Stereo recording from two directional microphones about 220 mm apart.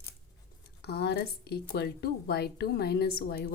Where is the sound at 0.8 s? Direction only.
45° left (ahead or behind).